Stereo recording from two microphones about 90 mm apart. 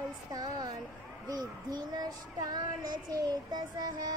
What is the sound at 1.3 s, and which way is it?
Child singing, 45° right (ahead or behind).